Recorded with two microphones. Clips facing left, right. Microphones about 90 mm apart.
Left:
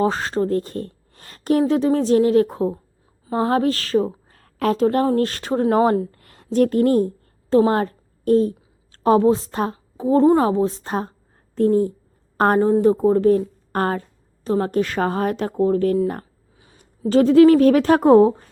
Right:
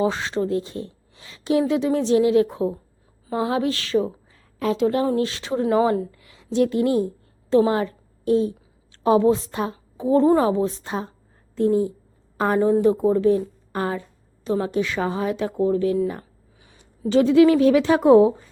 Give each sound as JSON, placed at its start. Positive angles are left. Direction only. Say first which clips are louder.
{"t": 0.0, "sound": "a woman's voice", "louder": "left 2 dB", "side_deg": 45}
{"t": 4.3, "sound": "a woman's voice", "louder": "left 3 dB", "side_deg": 50}